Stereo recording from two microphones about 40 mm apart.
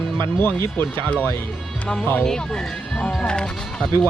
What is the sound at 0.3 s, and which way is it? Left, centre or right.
Speech, left.